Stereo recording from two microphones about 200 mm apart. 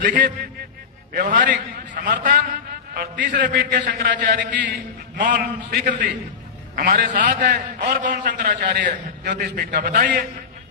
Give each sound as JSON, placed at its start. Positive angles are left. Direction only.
{"t": 0.0, "sound": "a man's voice", "side_deg": -40}